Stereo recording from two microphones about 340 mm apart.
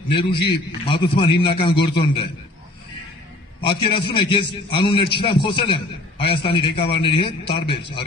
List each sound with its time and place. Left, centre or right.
0.1 s a man's voice: centre
3.6 s a man's voice: centre